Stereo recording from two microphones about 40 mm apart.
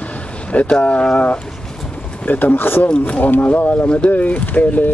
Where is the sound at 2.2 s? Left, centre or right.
Left.